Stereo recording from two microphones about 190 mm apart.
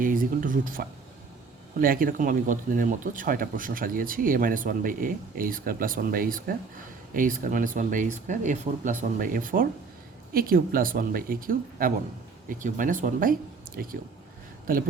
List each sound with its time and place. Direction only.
0.0 s speech: 45° right (ahead or behind)
14.7 s speech: 50° right (ahead or behind)